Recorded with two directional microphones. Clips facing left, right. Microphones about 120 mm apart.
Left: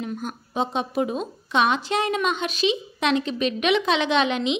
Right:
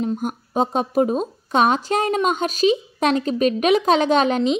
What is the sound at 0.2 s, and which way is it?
A woman's voice, 45° right (ahead or behind).